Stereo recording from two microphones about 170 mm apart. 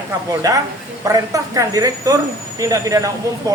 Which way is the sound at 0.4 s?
20° right (ahead or behind).